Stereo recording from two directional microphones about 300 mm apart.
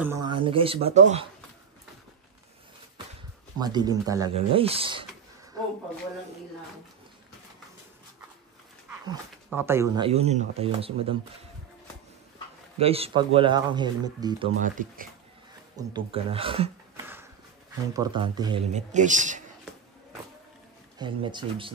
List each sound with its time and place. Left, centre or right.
0.0 s speech: centre
3.5 s speech: centre
9.0 s speech: centre
12.7 s speech: centre
14.6 s speech: right
15.7 s speech: centre
21.0 s speech: centre